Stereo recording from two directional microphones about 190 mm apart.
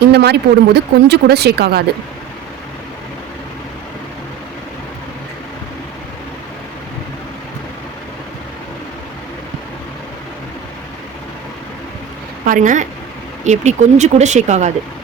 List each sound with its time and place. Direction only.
0.0 s speech: 60° right (ahead or behind)
12.5 s a woman's voice: 40° right (ahead or behind)